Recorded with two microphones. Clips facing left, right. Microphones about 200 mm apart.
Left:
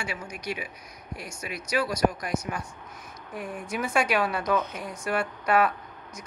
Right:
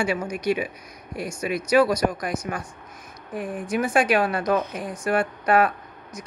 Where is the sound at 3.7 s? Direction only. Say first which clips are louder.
Right 5 dB; 50° right (ahead or behind).